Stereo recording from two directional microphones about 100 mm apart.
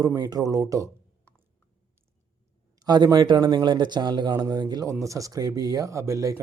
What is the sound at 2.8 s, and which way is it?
Speech, 45° right (ahead or behind).